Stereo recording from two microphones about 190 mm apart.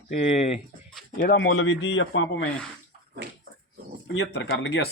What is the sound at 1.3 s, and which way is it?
A man's voice, 90° left.